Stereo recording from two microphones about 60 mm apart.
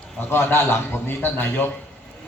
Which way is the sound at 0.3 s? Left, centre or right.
Left.